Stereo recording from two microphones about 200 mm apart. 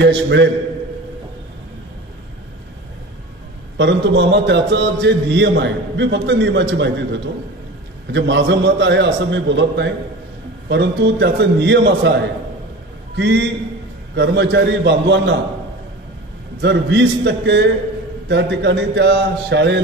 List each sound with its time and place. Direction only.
0.0 s a man's voice: 60° right (ahead or behind)
3.7 s a man's voice: 60° right (ahead or behind)
8.1 s a man's voice: 60° right (ahead or behind)
13.2 s a man's voice: 60° right (ahead or behind)
16.6 s a man's voice: 60° right (ahead or behind)